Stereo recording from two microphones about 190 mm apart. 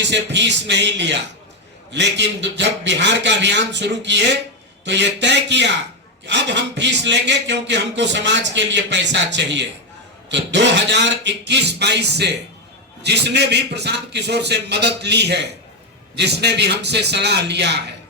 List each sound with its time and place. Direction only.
0.0 s a man's voice: 65° right (ahead or behind)